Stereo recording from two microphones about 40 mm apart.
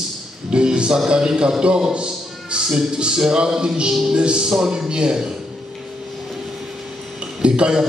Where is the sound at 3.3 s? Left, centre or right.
Right.